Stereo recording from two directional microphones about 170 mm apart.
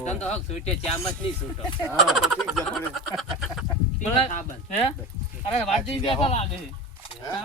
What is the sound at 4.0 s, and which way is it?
Speech, 45° left (ahead or behind).